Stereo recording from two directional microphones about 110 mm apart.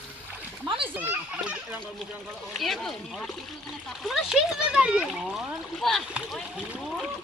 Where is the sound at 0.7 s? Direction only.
50° right (ahead or behind).